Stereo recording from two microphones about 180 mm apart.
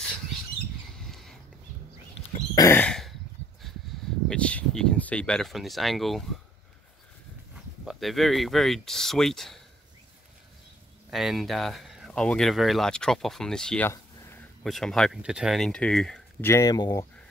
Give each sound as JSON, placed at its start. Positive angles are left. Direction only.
{"t": 0.9, "sound": "a sound", "side_deg": 0}
{"t": 2.5, "sound": "throat clearing", "side_deg": 20}
{"t": 2.8, "sound": "throat clearing", "side_deg": 5}
{"t": 4.3, "sound": "speech", "side_deg": 5}
{"t": 7.8, "sound": "speech", "side_deg": 0}
{"t": 11.1, "sound": "speech", "side_deg": 0}